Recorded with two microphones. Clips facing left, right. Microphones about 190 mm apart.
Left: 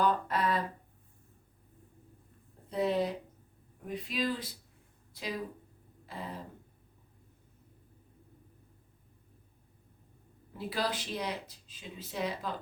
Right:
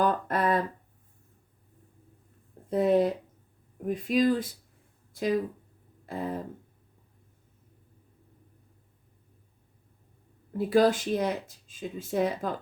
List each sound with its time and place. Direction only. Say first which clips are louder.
0.0 s a sound: right 4 dB; 50° right (ahead or behind)
2.6 s speech: right 7 dB; 50° right (ahead or behind)
10.6 s speech: right 12 dB; 50° right (ahead or behind)